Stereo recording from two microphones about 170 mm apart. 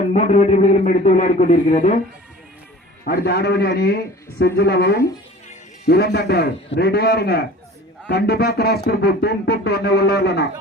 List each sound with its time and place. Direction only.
0.1 s speech: 45° left (ahead or behind)
3.0 s speech: 65° left (ahead or behind)